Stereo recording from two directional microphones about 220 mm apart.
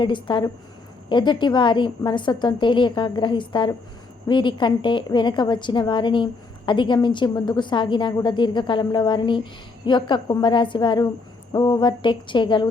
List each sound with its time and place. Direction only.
0.0 s a woman's voice: 20° left (ahead or behind)